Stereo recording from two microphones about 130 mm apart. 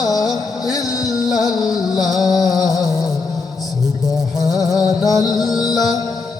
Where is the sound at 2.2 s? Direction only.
30° left (ahead or behind).